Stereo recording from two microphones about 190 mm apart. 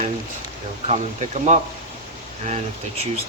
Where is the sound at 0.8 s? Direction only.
35° right (ahead or behind).